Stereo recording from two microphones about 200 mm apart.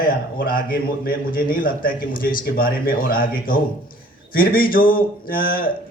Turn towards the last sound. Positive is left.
turn(degrees=45)  # may be behind; listen again after turning